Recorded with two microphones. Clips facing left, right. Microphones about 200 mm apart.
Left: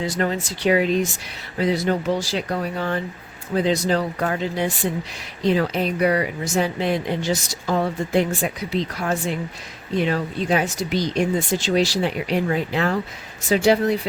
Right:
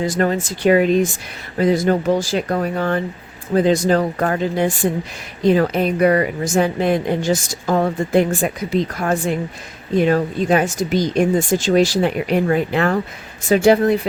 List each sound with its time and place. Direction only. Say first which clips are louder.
0.0 s a woman's voice: right 5 dB; 50° right (ahead or behind)